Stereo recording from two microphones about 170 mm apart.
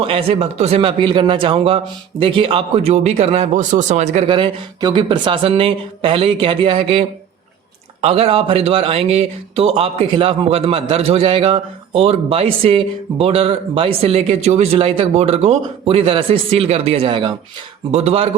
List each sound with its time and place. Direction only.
0.0 s speech: 35° right (ahead or behind)
8.0 s speech: 35° right (ahead or behind)